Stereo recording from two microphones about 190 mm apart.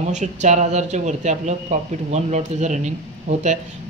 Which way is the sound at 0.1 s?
40° right (ahead or behind).